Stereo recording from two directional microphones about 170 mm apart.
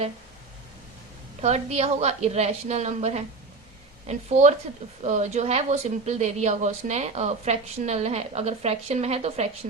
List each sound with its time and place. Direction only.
1.4 s a woman's voice: 40° right (ahead or behind)